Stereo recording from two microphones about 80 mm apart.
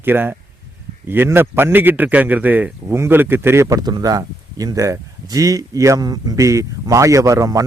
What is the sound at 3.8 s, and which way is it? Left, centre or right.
Speech, right.